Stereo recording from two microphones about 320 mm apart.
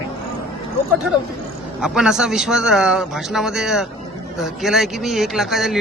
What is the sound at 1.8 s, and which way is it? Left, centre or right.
Speech, centre.